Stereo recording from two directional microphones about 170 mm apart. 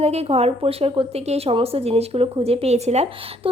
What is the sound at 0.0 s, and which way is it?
A woman's voice, 40° right (ahead or behind).